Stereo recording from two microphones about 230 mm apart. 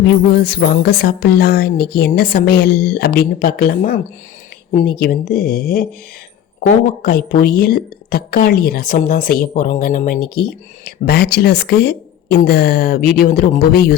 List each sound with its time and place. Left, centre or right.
0.3 s a woman's voice: left